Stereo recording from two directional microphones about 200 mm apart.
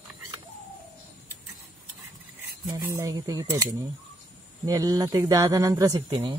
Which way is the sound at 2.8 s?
15° right (ahead or behind).